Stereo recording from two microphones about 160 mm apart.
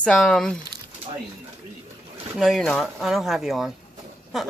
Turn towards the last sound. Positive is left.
turn(degrees=0)  # may be behind; listen again after turning